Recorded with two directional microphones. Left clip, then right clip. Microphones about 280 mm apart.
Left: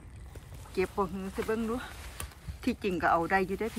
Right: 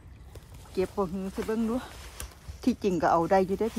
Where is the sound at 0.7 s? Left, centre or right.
Centre.